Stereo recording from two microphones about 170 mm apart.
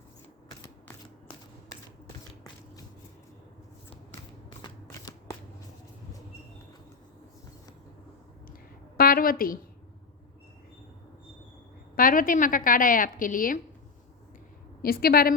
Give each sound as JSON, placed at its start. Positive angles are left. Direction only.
{"t": 4.6, "sound": "shuffling cards", "side_deg": 20}
{"t": 9.0, "sound": "a woman's voice", "side_deg": 60}
{"t": 11.9, "sound": "a woman's voice", "side_deg": 55}
{"t": 14.8, "sound": "a woman's voice", "side_deg": 60}